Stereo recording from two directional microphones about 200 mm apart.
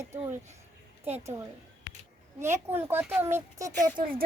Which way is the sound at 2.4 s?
10° right (ahead or behind).